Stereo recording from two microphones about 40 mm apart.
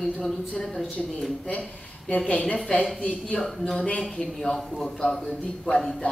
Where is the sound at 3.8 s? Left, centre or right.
Left.